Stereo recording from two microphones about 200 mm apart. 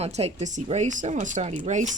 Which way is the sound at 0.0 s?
30° right (ahead or behind).